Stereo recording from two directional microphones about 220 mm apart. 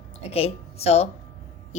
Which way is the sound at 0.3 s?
25° left (ahead or behind).